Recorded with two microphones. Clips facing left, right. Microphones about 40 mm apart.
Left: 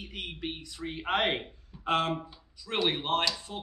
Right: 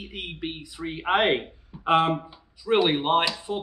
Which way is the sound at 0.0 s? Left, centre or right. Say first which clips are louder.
Right 4 dB; centre.